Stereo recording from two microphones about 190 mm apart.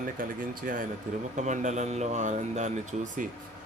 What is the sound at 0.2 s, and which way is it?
Speech, 45° right (ahead or behind).